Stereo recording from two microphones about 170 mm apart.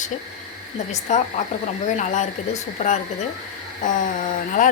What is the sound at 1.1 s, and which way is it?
Speech, 45° left (ahead or behind).